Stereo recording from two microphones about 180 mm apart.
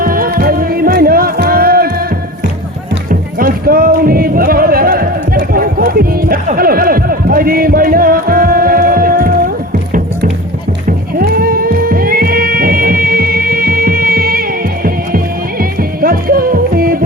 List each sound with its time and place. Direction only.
0.0 s music: 55° right (ahead or behind)
3.1 s music: 55° right (ahead or behind)
10.8 s music: 55° right (ahead or behind)
15.8 s music: 55° right (ahead or behind)